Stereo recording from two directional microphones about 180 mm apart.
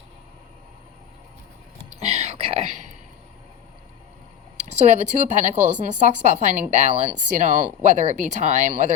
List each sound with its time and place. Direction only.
2.0 s whispering: 35° right (ahead or behind)
4.5 s speech: 40° right (ahead or behind)